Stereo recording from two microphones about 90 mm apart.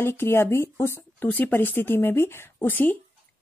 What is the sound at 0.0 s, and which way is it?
Speech, 25° left (ahead or behind).